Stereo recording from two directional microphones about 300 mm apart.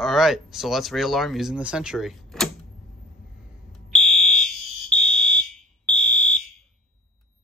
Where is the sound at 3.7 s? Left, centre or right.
Centre.